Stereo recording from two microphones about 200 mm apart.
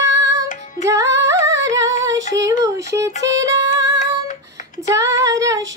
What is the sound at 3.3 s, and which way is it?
Music, 65° right (ahead or behind).